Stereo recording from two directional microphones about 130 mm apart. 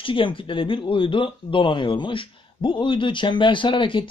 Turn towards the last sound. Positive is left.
turn(degrees=40)  # may be behind; listen again after turning